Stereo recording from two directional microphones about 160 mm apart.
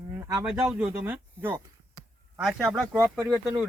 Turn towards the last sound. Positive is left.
turn(degrees=0)  # may be behind; listen again after turning